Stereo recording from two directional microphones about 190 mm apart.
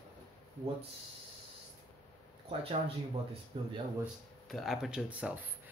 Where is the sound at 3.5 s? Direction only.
25° right (ahead or behind).